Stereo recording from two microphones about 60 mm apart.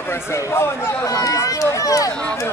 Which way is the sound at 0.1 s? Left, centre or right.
Left.